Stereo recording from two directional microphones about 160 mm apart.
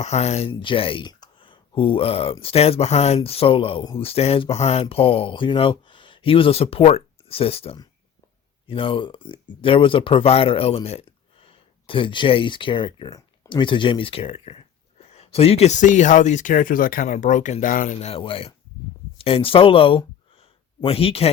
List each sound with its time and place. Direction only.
0.0 s speech: 40° left (ahead or behind)
18.1 s speech: 35° left (ahead or behind)